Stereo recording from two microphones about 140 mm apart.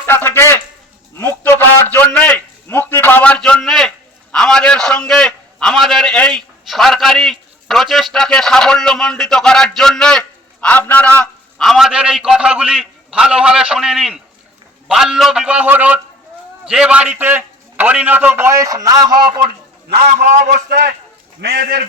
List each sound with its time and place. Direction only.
0.0 s a man's voice: 15° left (ahead or behind)
1.2 s a sound: 15° left (ahead or behind); by 14.2 s 5° right (ahead or behind)
14.8 s a man's voice: 5° right (ahead or behind); by 19.4 s 30° right (ahead or behind)
20.1 s a man's voice: 70° right (ahead or behind)